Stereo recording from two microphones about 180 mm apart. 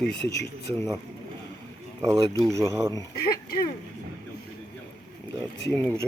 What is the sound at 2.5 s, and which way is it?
Speech, 15° right (ahead or behind).